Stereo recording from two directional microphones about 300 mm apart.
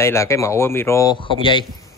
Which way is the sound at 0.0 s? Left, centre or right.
Centre.